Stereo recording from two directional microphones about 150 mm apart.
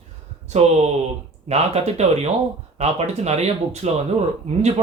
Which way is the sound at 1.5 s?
45° right (ahead or behind).